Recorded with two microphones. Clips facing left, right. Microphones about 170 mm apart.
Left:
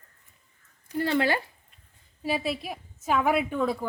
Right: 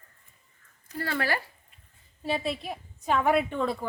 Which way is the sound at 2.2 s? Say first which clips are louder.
Left 1 dB; 5° left (ahead or behind).